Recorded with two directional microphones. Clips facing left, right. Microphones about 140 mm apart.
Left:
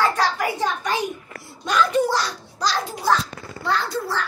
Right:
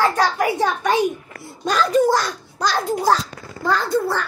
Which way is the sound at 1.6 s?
35° right (ahead or behind).